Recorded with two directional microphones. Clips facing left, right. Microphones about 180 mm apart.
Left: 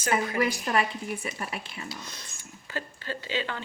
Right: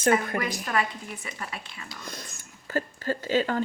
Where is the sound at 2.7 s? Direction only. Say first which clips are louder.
Right 7 dB; 45° right (ahead or behind).